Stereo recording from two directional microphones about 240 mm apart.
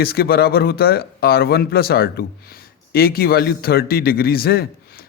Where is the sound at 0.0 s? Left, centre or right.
Left.